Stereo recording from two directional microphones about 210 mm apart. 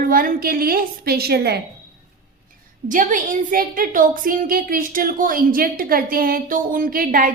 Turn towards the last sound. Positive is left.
turn(degrees=-45)  # may be behind; listen again after turning